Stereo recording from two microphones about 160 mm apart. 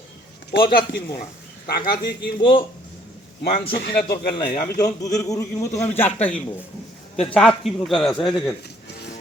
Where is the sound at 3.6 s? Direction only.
80° left.